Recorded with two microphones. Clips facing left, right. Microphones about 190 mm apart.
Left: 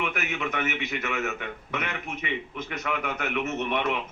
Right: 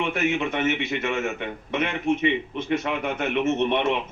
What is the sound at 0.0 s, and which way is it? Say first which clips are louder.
A man's voice: right 6 dB; 25° right (ahead or behind).